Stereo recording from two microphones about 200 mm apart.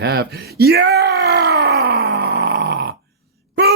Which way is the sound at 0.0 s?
55° right (ahead or behind).